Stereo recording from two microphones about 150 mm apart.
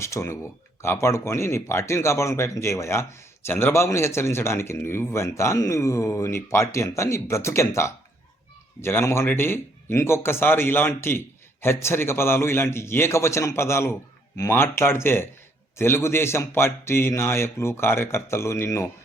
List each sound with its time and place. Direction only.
0.0 s a man's voice: 20° left (ahead or behind)